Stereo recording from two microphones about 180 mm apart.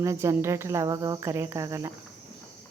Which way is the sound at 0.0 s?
15° right (ahead or behind).